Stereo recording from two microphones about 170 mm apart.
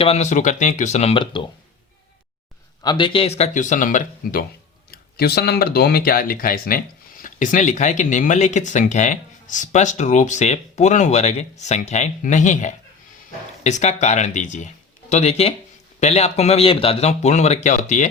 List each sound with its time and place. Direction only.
0.0 s speech: 40° left (ahead or behind)
2.8 s speech: 25° left (ahead or behind); by 4.4 s 55° left (ahead or behind)
4.9 s speech: 65° left (ahead or behind); by 18.1 s 45° left (ahead or behind)